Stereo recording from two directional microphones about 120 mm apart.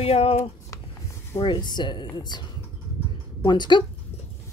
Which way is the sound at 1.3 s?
40° left (ahead or behind).